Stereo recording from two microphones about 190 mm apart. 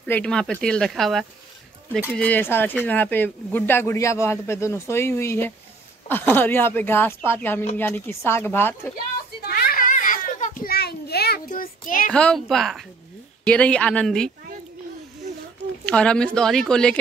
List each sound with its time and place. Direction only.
0.0 s speech: 5° left (ahead or behind)
9.5 s children playing: 50° left (ahead or behind)
12.1 s speech: 5° left (ahead or behind)
15.8 s speech: 5° left (ahead or behind)